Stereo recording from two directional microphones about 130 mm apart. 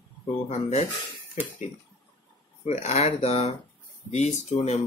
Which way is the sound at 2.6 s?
60° left (ahead or behind).